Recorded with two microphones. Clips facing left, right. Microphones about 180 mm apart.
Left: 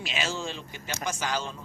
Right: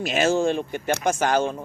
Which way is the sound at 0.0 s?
50° right (ahead or behind).